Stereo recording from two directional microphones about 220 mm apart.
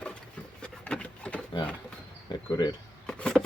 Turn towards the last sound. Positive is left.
turn(degrees=5)  # may be behind; listen again after turning